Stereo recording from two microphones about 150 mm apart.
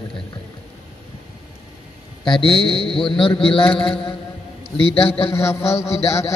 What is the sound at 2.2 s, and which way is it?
A man's voice, 30° left (ahead or behind).